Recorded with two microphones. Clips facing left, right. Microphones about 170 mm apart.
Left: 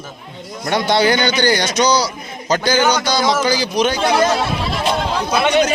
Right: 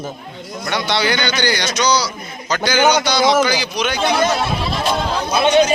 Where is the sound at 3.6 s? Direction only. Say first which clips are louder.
Left 5 dB; 45° left (ahead or behind).